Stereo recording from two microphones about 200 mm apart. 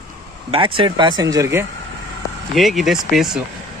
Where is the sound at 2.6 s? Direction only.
Centre (ahead or behind).